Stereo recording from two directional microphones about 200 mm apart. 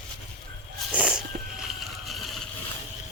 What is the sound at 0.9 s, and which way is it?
Cat, 5° right (ahead or behind).